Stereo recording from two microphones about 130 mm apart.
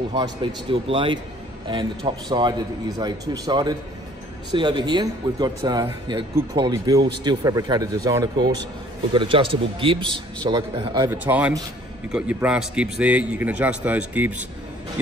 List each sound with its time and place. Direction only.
0.1 s a man's voice: 35° right (ahead or behind)
9.1 s a man's voice: 40° right (ahead or behind)
11.1 s a man's voice: 10° right (ahead or behind)